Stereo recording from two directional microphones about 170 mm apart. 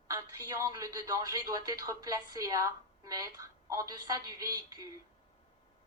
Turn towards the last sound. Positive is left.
turn(degrees=-20)  # may be behind; listen again after turning